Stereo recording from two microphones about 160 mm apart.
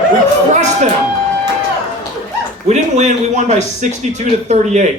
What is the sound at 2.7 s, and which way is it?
Speech, 45° right (ahead or behind).